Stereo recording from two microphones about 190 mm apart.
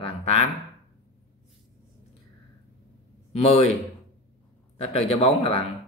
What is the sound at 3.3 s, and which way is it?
Speech, 35° left (ahead or behind).